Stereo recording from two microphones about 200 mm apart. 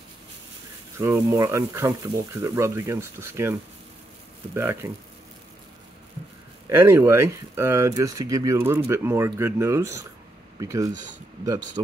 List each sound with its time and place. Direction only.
0.9 s speech: 15° right (ahead or behind)
4.6 s speech: 15° right (ahead or behind)
6.7 s speech: 10° right (ahead or behind)
10.9 s speech: 40° right (ahead or behind)
11.4 s speech: 15° right (ahead or behind)